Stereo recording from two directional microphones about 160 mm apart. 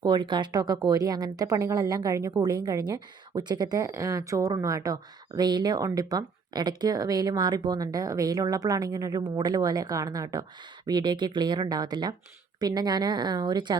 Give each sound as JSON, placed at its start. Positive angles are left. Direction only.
{"t": 0.0, "sound": "speech", "side_deg": -30}